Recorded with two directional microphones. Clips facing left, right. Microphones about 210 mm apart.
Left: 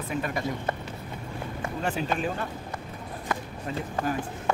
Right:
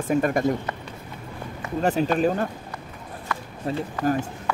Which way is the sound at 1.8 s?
40° right (ahead or behind).